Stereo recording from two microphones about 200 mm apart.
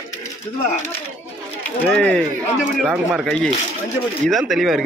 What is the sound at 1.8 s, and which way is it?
A man's voice, 5° left (ahead or behind).